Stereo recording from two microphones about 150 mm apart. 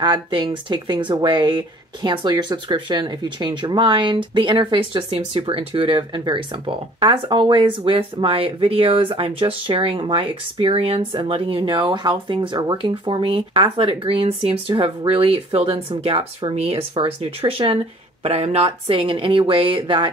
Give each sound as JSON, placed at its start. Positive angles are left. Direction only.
{"t": 0.0, "sound": "speech", "side_deg": -30}